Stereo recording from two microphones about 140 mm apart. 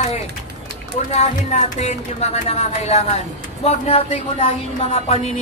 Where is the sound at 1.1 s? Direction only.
55° left (ahead or behind).